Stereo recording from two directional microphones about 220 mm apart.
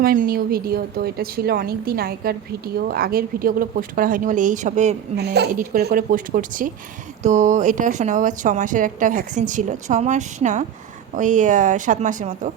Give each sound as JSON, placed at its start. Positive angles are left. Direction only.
{"t": 0.0, "sound": "speech", "side_deg": -40}
{"t": 5.1, "sound": "speech", "side_deg": -50}